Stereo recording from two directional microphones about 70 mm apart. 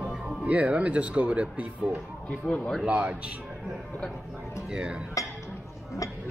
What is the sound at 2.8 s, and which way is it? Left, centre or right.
Speech, centre.